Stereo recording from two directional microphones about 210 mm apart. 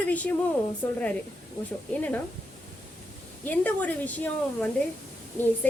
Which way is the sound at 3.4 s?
5° left (ahead or behind).